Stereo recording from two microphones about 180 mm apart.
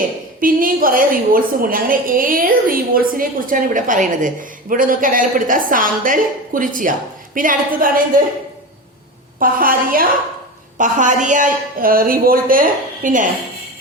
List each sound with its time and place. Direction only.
0.3 s a woman's voice: 50° right (ahead or behind)
9.4 s a woman's voice: 50° right (ahead or behind)